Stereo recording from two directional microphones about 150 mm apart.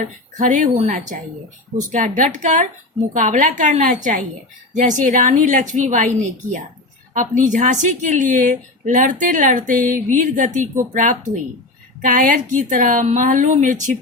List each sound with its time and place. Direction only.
0.0 s a woman's voice: 55° right (ahead or behind)
7.1 s a woman's voice: 60° right (ahead or behind)